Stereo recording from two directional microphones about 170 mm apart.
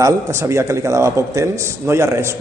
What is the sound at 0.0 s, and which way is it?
Speech, 15° right (ahead or behind).